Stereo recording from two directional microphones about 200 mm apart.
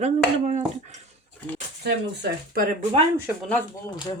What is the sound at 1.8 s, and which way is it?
Speech, 55° right (ahead or behind).